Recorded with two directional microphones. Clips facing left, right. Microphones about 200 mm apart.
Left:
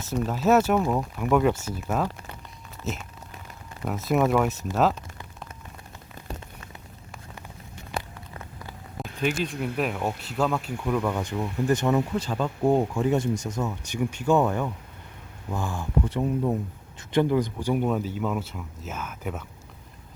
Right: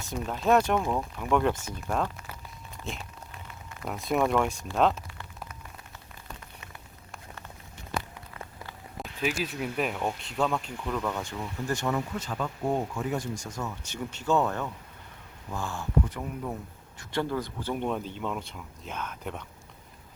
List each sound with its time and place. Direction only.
0.1 s speech: 5° left (ahead or behind)
9.0 s speech: 5° right (ahead or behind); by 12.0 s 20° left (ahead or behind)
12.1 s speech: 30° left (ahead or behind); by 15.9 s 15° left (ahead or behind)
16.0 s speech: 25° left (ahead or behind); by 19.5 s 5° left (ahead or behind)